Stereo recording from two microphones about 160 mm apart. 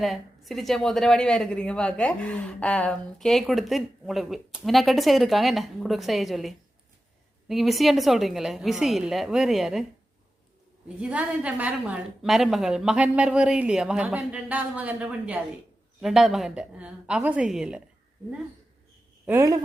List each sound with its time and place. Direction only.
0.0 s a woman's voice: centre (ahead or behind)
10.8 s a woman's voice: 10° right (ahead or behind)
19.2 s a woman's voice: 15° right (ahead or behind)